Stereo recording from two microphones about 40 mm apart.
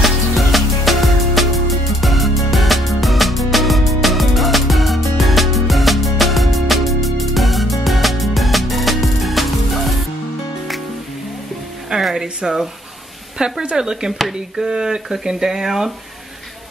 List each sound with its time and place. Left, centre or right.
0.0 s music: centre
12.0 s a sound: centre
12.4 s speech: centre